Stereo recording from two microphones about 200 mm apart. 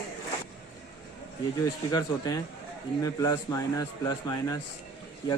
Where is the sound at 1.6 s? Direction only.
20° left (ahead or behind).